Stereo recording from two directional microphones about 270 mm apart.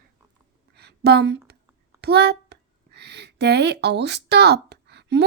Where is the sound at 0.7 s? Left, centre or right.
Right.